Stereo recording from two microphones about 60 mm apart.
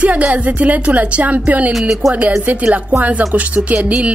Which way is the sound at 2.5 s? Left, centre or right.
Right.